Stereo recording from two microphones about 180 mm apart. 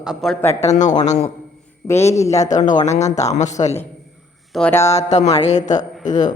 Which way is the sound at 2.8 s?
40° left (ahead or behind).